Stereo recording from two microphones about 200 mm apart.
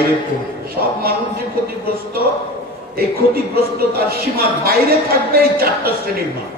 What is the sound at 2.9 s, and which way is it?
Speech, 50° right (ahead or behind).